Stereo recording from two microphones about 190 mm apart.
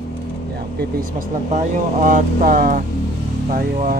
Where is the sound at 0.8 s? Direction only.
50° right (ahead or behind).